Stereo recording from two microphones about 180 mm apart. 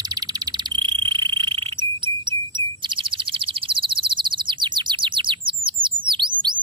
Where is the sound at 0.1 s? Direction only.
25° right (ahead or behind).